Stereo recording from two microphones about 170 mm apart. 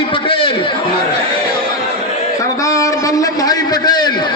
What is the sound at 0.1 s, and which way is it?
Chatter, 30° left (ahead or behind).